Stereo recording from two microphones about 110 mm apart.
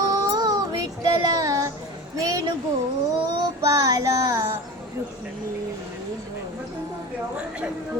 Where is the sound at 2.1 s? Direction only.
30° right (ahead or behind).